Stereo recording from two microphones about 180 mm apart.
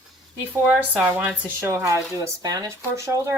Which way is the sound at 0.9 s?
10° right (ahead or behind).